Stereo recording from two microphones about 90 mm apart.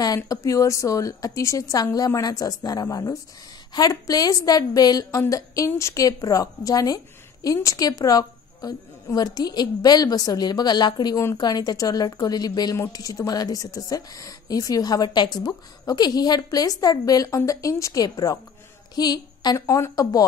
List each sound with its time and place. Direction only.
0.0 s a woman's voice: 40° left (ahead or behind)
19.6 s a woman's voice: 35° left (ahead or behind)